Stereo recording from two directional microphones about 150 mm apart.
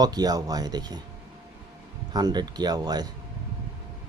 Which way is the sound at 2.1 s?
25° right (ahead or behind).